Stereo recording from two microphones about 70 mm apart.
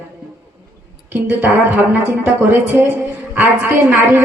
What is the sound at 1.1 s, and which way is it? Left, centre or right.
A woman's voice, right.